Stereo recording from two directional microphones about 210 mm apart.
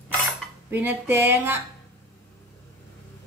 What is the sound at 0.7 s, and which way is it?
Speech, 10° right (ahead or behind).